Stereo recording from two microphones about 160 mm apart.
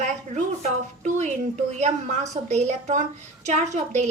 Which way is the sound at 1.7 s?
45° right (ahead or behind).